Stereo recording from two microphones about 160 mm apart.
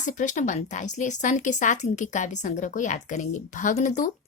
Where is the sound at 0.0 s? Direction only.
50° left (ahead or behind).